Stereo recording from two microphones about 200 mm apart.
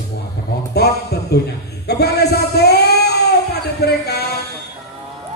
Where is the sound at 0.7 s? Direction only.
55° left (ahead or behind).